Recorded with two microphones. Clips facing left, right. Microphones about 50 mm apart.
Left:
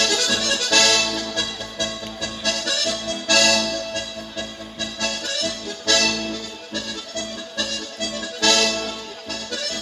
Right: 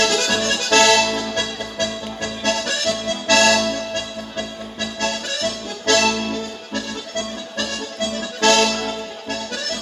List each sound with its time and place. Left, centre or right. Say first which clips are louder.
0.0 s accordion: right 3 dB; right